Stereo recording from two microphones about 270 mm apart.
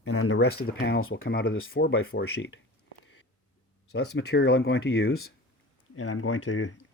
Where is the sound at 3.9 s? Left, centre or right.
Left.